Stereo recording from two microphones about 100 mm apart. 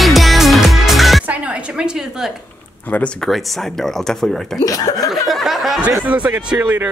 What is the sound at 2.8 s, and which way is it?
Speech, 15° left (ahead or behind).